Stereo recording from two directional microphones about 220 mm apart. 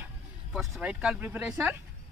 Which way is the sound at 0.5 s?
Centre (ahead or behind).